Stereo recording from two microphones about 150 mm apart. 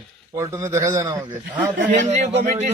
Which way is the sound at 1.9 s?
50° right (ahead or behind).